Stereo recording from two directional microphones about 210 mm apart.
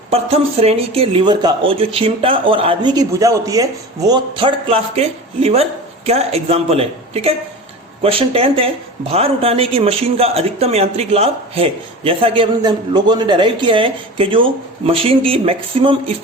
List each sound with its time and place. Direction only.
0.1 s speech: 30° right (ahead or behind)